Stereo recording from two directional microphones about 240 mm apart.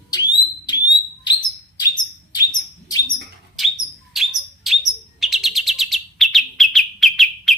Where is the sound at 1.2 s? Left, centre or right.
Centre.